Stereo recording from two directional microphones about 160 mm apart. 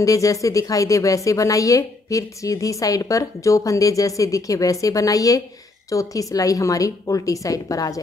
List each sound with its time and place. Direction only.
0.0 s speech: 20° left (ahead or behind)